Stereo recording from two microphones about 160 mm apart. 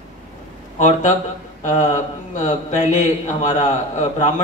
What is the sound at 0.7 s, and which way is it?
Speech, 50° left (ahead or behind).